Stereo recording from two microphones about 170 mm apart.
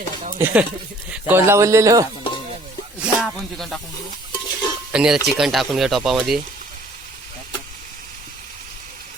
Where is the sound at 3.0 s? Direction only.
Centre (ahead or behind).